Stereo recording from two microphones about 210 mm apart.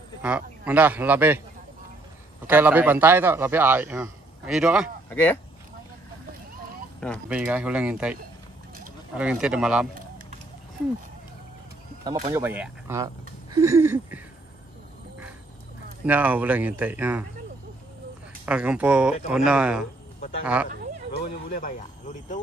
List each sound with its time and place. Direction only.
0.2 s a man's voice: 5° right (ahead or behind)
2.4 s a man's voice: 10° right (ahead or behind)
5.1 s speech: 10° left (ahead or behind)
7.2 s speech: 5° right (ahead or behind)
12.0 s a man's voice: 15° right (ahead or behind)
13.6 s a sound: 15° right (ahead or behind)
16.1 s a man's voice: 10° right (ahead or behind)
18.4 s speech: 5° right (ahead or behind)
21.2 s speech: 45° left (ahead or behind)